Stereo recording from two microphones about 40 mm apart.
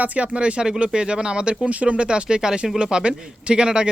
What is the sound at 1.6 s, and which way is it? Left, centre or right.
A man's voice, right.